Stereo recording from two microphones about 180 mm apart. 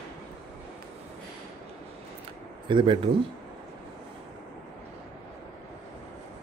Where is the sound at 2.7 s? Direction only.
25° right (ahead or behind).